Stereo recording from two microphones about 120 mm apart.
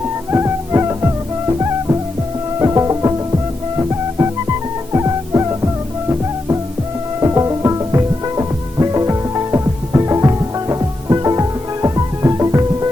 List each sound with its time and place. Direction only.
0.3 s music: 20° right (ahead or behind)